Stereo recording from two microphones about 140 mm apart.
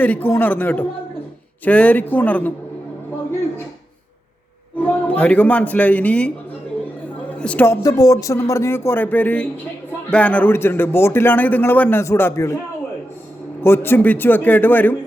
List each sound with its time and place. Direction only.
0.0 s a man's voice: 15° left (ahead or behind)
4.8 s a man's voice: 10° left (ahead or behind)
7.3 s a man's voice: 10° left (ahead or behind)
13.6 s a man's voice: 15° left (ahead or behind)